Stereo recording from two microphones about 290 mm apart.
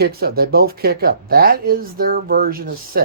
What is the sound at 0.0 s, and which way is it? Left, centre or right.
Speech, right.